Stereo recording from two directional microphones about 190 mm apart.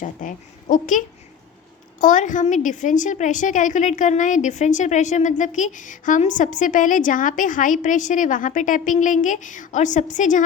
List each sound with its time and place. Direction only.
0.0 s a woman's voice: 40° left (ahead or behind)